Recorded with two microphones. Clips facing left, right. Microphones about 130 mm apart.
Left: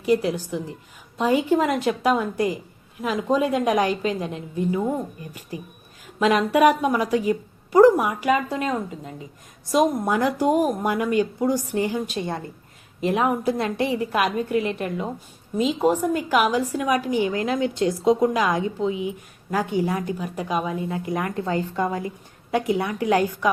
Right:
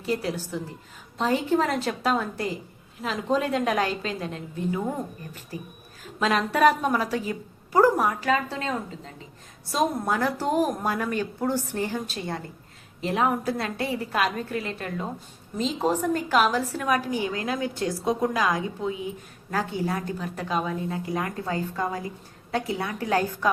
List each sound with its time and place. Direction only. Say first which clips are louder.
0.0 s a woman's voice: left 7 dB; 15° left (ahead or behind)
9.7 s a woman's voice: left 5 dB; 15° left (ahead or behind)